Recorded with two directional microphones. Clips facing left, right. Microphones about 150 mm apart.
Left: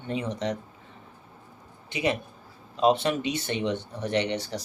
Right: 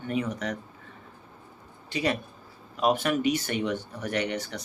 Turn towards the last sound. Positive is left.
turn(degrees=30)  # may be behind; listen again after turning